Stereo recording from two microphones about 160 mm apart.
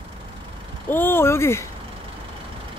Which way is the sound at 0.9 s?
15° left (ahead or behind).